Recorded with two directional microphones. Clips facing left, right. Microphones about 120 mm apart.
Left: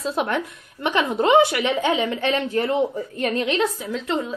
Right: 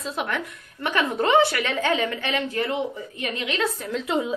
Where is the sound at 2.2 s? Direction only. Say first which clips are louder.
Left 4 dB; 30° left (ahead or behind).